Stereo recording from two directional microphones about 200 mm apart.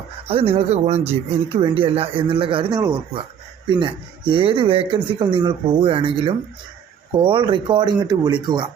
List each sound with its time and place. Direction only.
0.3 s speech: 30° right (ahead or behind)
4.3 s speech: 25° right (ahead or behind)